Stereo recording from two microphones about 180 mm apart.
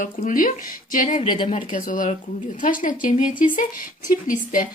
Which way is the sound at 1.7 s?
45° left (ahead or behind).